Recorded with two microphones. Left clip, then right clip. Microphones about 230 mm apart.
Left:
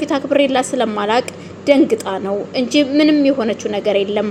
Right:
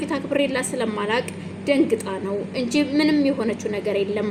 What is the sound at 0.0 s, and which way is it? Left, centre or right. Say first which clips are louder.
A woman's voice: left 8 dB; centre.